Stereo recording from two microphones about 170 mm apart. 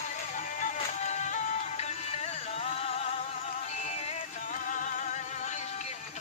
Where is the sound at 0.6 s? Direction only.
45° left (ahead or behind).